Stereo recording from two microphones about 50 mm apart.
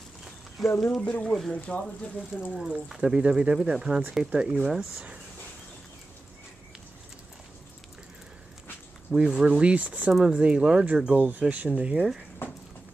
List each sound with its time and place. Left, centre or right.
0.6 s speech: centre
0.9 s speech: left
1.3 s speech: centre
1.7 s speech: left
2.3 s speech: centre
9.1 s speech: centre
11.1 s speech: right